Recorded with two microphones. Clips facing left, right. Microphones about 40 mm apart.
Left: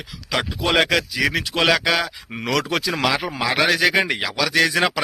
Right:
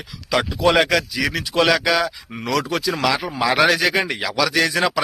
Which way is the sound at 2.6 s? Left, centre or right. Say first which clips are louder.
Right 1 dB; left.